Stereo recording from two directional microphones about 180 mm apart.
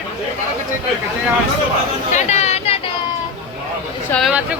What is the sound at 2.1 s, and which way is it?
Chatter, 40° left (ahead or behind).